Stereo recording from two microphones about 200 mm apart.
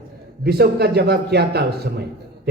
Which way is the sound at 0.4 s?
55° right (ahead or behind).